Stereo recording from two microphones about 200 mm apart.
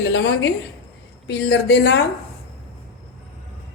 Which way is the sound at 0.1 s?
60° left (ahead or behind).